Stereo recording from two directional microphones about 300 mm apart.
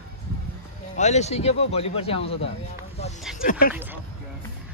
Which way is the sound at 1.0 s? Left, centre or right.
Left.